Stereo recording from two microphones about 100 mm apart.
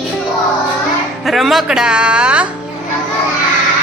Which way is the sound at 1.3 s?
Centre (ahead or behind).